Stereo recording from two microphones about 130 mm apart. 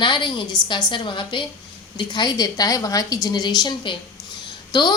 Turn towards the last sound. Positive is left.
turn(degrees=35)  # may be behind; listen again after turning